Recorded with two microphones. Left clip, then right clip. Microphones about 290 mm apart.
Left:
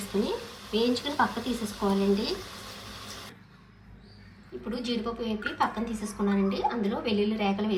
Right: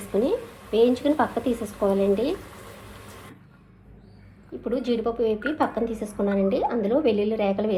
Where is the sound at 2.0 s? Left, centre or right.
Centre.